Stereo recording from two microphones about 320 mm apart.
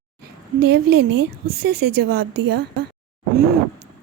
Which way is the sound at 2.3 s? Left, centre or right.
Right.